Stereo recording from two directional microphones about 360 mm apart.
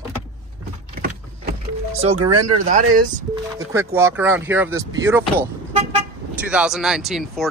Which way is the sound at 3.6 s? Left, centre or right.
Centre.